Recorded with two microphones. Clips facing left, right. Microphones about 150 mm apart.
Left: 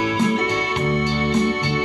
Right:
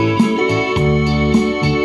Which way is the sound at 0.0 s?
35° right (ahead or behind).